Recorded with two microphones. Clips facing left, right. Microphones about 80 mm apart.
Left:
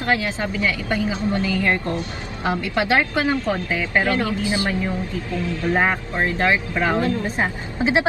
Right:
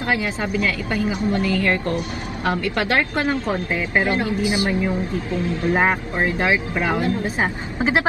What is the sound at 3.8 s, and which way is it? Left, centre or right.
A woman's voice, centre.